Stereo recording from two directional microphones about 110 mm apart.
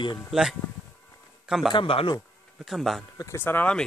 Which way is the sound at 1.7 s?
50° left (ahead or behind).